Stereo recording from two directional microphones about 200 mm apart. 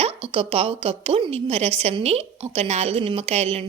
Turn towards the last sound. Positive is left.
turn(degrees=-30)  # may be behind; listen again after turning